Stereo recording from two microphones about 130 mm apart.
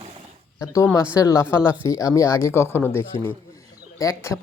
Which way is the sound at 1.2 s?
25° left (ahead or behind).